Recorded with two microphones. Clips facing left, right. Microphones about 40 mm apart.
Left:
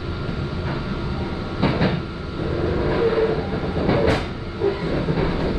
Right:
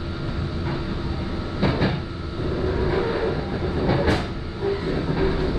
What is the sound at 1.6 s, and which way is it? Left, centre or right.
Train, centre.